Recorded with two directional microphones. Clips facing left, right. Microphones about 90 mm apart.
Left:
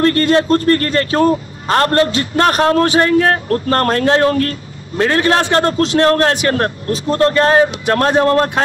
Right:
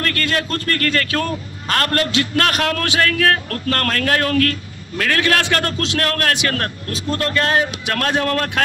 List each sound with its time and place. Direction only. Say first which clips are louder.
0.0 s a man's voice: left 9 dB; 30° left (ahead or behind)